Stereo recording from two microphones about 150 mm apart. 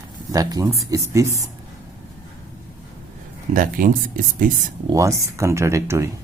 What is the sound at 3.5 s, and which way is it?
Speech, 65° right (ahead or behind).